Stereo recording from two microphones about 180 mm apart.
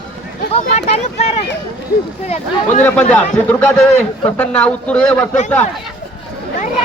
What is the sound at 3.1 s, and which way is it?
A man's voice, 10° left (ahead or behind).